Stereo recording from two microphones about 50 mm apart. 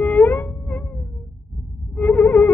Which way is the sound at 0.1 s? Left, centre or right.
Left.